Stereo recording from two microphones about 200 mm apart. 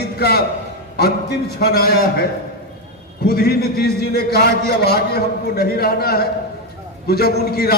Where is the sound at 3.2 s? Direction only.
50° left (ahead or behind).